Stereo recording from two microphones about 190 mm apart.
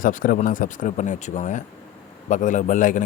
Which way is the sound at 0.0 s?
45° left (ahead or behind).